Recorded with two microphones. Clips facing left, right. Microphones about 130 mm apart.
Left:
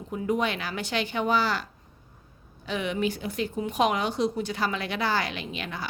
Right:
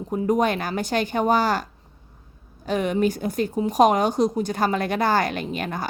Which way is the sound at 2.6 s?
45° right (ahead or behind).